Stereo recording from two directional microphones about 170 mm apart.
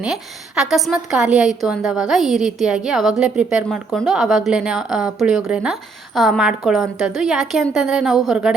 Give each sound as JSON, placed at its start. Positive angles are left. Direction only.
{"t": 0.0, "sound": "a woman's voice", "side_deg": -5}